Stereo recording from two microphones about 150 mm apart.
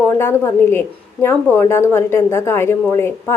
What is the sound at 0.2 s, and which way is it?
A woman's voice, 15° left (ahead or behind).